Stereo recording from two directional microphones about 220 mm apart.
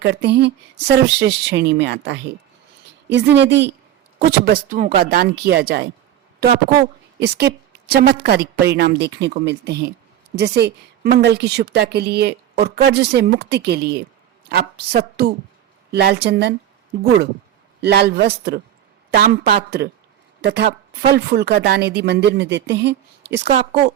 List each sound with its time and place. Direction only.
0.0 s a woman's voice: 50° right (ahead or behind)
7.2 s a woman's voice: 45° right (ahead or behind)